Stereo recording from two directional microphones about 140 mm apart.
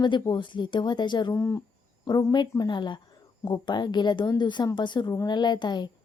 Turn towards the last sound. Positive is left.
turn(degrees=30)  # may be behind; listen again after turning